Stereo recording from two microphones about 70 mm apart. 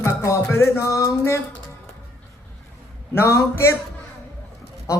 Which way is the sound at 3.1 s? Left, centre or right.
Left.